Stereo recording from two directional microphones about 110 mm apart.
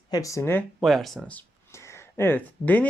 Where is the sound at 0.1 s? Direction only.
30° left (ahead or behind).